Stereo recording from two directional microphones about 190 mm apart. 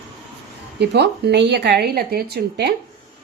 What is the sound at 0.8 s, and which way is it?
A woman's voice, 60° right (ahead or behind).